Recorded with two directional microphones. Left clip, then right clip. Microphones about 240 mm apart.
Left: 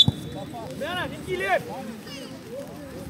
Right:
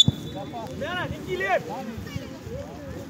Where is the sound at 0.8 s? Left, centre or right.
Left.